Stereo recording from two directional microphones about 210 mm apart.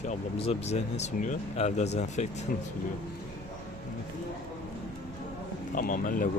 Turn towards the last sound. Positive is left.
turn(degrees=40)  # may be behind; listen again after turning